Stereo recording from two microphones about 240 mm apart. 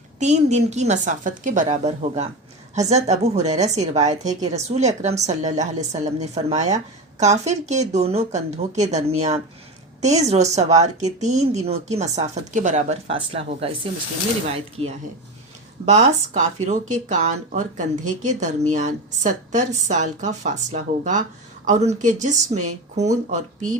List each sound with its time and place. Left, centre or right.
0.2 s a woman's voice: right